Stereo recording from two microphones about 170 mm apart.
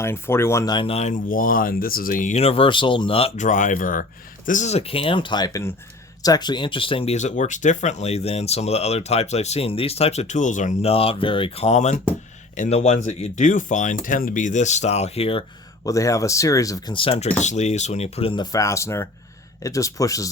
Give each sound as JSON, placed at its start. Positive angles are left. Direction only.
{"t": 0.0, "sound": "speech", "side_deg": 15}
{"t": 15.8, "sound": "speech", "side_deg": 20}